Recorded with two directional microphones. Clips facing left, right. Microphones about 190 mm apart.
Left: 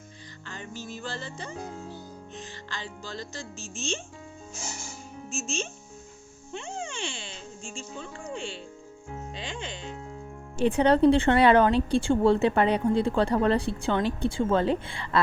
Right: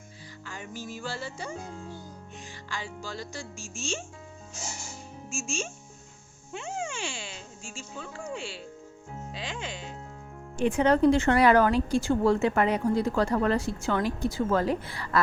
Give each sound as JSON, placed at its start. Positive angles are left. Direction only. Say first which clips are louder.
{"t": 0.4, "sound": "speech", "louder": "even", "side_deg": -10}
{"t": 2.6, "sound": "speech", "louder": "right 4 dB", "side_deg": -10}
{"t": 5.3, "sound": "speech", "louder": "left 1 dB", "side_deg": -10}
{"t": 10.6, "sound": "speech", "louder": "left 2 dB", "side_deg": 30}